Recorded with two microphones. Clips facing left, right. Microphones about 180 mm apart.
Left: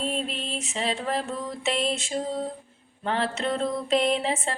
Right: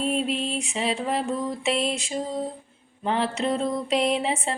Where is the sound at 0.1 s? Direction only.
5° right (ahead or behind).